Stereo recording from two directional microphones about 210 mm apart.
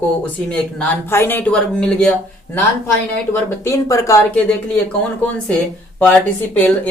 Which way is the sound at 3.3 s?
15° left (ahead or behind).